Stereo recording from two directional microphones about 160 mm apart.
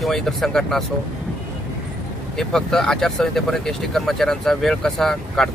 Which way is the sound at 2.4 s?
5° left (ahead or behind).